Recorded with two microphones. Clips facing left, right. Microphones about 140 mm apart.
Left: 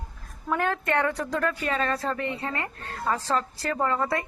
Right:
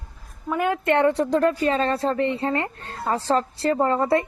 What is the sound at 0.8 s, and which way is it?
Speech, 25° right (ahead or behind).